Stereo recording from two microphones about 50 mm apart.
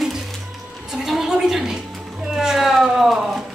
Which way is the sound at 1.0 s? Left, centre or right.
Centre.